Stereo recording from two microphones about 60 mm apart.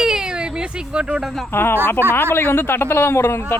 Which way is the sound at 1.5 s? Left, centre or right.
Left.